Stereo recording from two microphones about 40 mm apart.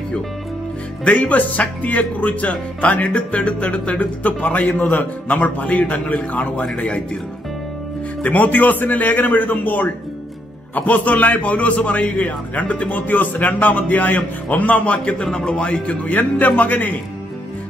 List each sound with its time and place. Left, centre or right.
1.0 s a man's voice: left
8.2 s a man's voice: left
15.3 s a man's voice: left